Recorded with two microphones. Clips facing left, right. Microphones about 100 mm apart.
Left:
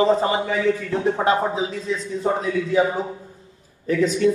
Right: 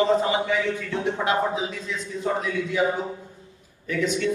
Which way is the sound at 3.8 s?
35° left (ahead or behind).